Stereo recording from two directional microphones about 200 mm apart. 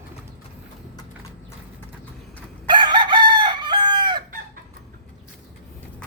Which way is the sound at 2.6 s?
25° right (ahead or behind).